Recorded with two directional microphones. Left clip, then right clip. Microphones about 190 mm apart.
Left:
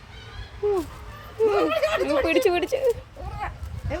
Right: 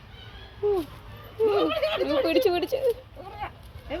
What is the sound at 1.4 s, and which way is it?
Speech, centre (ahead or behind).